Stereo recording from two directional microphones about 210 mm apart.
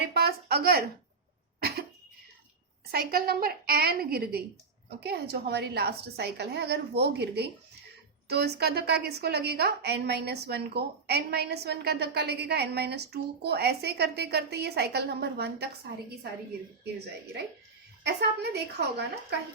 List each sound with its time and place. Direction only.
0.0 s speech: 50° right (ahead or behind)
2.9 s a woman's voice: 45° right (ahead or behind)
18.0 s a woman's voice: 55° right (ahead or behind)